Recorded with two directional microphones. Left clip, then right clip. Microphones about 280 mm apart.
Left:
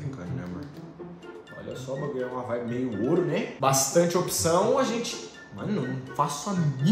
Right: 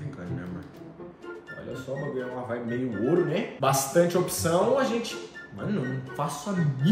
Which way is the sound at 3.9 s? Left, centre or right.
Centre.